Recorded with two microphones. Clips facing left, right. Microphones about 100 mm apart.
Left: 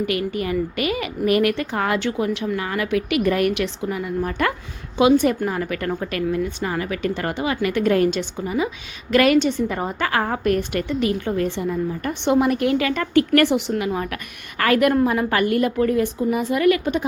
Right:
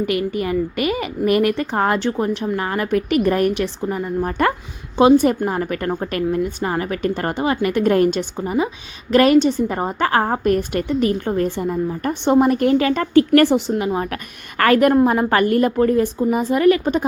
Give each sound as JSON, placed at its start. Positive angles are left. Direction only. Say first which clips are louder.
{"t": 0.4, "sound": "a woman's voice", "louder": "right 2 dB", "side_deg": -40}